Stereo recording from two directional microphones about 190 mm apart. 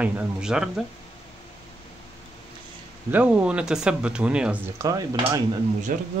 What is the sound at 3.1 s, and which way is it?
A man's voice, 5° right (ahead or behind).